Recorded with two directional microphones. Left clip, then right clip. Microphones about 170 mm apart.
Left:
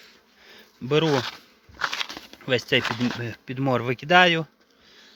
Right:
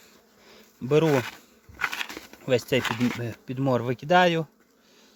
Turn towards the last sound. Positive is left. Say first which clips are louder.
# left 5 dB
turn(degrees=0)  # may be behind; listen again after turning